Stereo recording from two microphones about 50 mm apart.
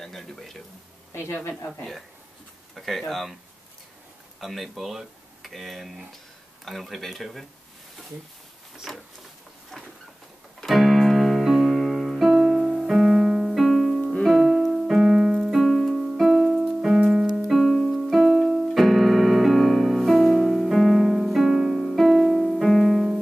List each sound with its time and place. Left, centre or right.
0.0 s speech: centre
1.1 s a woman's voice: left
2.7 s speech: centre
4.4 s speech: centre
8.9 s speech: centre
10.6 s music: centre
17.5 s keyboard: centre
22.7 s music: centre